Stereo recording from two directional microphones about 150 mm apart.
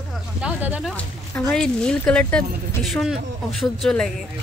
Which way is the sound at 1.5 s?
5° left (ahead or behind).